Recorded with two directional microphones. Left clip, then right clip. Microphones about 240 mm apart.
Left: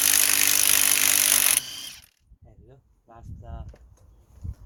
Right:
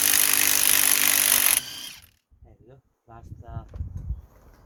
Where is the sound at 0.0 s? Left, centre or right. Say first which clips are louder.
Left 1 dB; centre.